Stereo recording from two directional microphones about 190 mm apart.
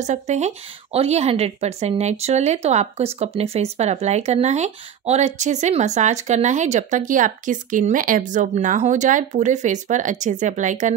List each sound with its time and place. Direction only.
0.0 s a woman's voice: 35° right (ahead or behind)